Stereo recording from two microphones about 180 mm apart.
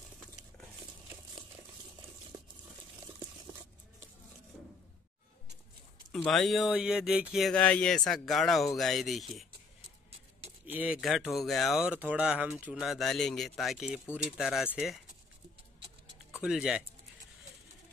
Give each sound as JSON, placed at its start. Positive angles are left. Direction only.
{"t": 2.3, "sound": "a sound", "side_deg": -20}
{"t": 6.2, "sound": "speech", "side_deg": 0}
{"t": 10.7, "sound": "speech", "side_deg": -10}
{"t": 16.3, "sound": "speech", "side_deg": -5}